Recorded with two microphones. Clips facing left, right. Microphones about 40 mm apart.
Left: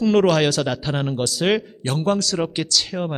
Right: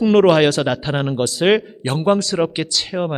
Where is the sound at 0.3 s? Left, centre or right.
Centre.